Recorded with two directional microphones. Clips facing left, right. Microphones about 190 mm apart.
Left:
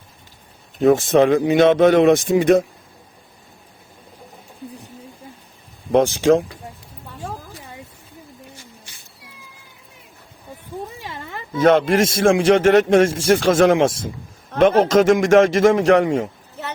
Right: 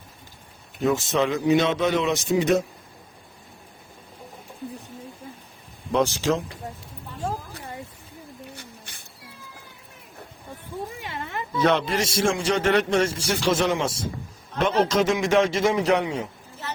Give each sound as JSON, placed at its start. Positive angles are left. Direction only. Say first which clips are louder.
{"t": 0.8, "sound": "a man's voice", "louder": "left 9 dB", "side_deg": 50}
{"t": 5.9, "sound": "a man's voice", "louder": "left 8 dB", "side_deg": 55}
{"t": 8.5, "sound": "a sound", "louder": "right 1 dB", "side_deg": -60}
{"t": 11.5, "sound": "a man's voice", "louder": "left 7 dB", "side_deg": 50}
{"t": 13.7, "sound": "speech", "louder": "left 9 dB", "side_deg": 90}
{"t": 14.5, "sound": "a man's voice", "louder": "left 8 dB", "side_deg": 50}
{"t": 16.0, "sound": "a sound", "louder": "left 9 dB", "side_deg": 50}